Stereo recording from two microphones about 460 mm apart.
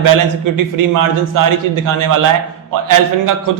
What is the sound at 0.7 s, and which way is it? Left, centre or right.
A man's voice, right.